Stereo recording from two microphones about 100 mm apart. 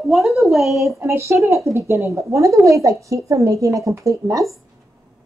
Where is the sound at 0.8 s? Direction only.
30° right (ahead or behind).